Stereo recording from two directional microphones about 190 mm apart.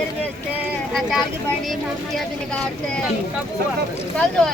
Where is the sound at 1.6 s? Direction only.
Centre (ahead or behind).